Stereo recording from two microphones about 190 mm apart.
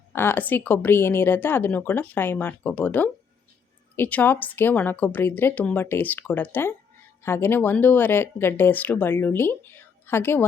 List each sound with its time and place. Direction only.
0.1 s a woman's voice: 10° left (ahead or behind)